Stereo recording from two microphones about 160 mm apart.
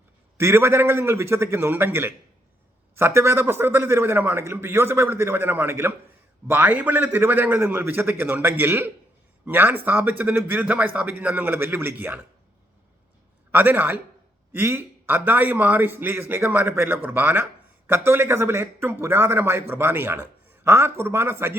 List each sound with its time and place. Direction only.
0.3 s a man's voice: 15° right (ahead or behind)
13.5 s a man's voice: 10° right (ahead or behind)